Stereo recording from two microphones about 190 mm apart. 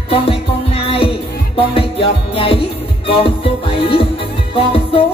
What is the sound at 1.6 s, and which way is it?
Music, 30° left (ahead or behind).